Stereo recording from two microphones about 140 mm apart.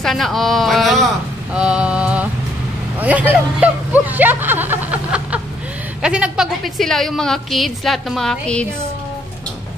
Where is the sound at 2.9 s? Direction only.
10° right (ahead or behind); by 8.6 s 5° left (ahead or behind).